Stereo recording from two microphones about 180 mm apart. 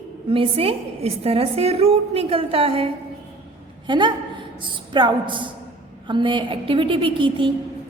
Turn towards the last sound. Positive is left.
turn(degrees=-25)  # may be behind; listen again after turning